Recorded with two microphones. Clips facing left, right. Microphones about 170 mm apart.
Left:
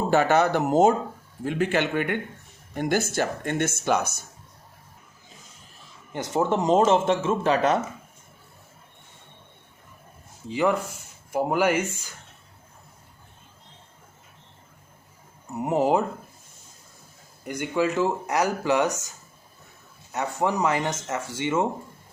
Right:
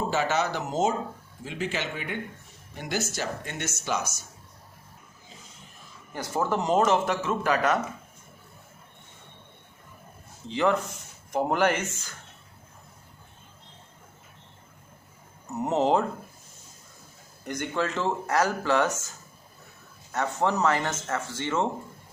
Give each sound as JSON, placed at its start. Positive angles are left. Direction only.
{"t": 0.1, "sound": "speech", "side_deg": 55}
{"t": 6.1, "sound": "speech", "side_deg": 20}
{"t": 10.5, "sound": "speech", "side_deg": 10}
{"t": 15.5, "sound": "speech", "side_deg": 10}
{"t": 17.4, "sound": "speech", "side_deg": 10}
{"t": 20.1, "sound": "speech", "side_deg": 10}